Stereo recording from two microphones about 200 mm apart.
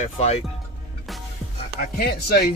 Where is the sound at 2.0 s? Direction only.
50° left (ahead or behind).